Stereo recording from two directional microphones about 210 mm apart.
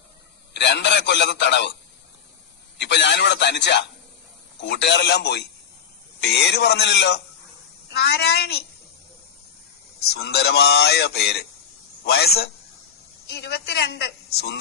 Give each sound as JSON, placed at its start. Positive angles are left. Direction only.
{"t": 0.5, "sound": "a man's voice", "side_deg": 55}
{"t": 2.7, "sound": "a man's voice", "side_deg": 55}
{"t": 10.0, "sound": "a man's voice", "side_deg": 50}